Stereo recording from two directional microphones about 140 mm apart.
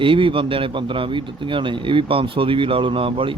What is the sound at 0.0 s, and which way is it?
Speech, 40° right (ahead or behind).